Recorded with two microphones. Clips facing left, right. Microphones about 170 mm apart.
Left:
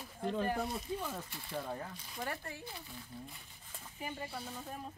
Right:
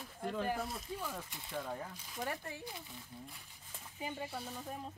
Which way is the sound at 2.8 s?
Centre (ahead or behind).